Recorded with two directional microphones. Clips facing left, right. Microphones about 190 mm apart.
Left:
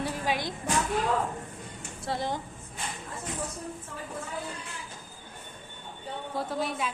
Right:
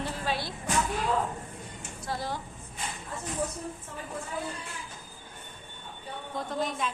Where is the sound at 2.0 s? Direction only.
25° left (ahead or behind).